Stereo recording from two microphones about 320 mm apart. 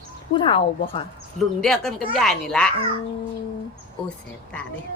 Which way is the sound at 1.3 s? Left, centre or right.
Centre.